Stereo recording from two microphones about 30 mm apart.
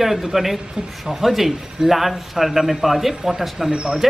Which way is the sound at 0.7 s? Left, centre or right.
Right.